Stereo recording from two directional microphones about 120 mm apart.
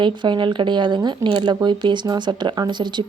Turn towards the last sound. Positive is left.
turn(degrees=-40)  # may be behind; listen again after turning